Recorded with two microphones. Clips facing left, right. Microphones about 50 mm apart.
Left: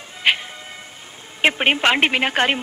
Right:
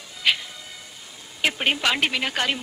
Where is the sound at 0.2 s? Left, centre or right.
Left.